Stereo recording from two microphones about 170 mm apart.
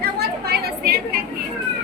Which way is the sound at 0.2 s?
65° right (ahead or behind).